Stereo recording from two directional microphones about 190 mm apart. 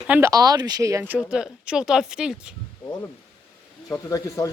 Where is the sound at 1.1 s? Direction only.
5° right (ahead or behind).